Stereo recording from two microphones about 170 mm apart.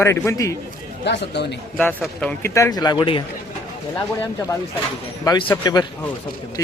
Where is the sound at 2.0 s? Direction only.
5° left (ahead or behind); by 3.2 s 30° left (ahead or behind).